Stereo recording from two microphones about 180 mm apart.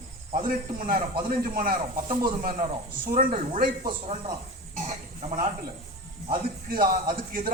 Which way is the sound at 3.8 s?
25° right (ahead or behind).